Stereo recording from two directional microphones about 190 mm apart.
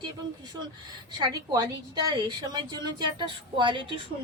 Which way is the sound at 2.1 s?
20° right (ahead or behind).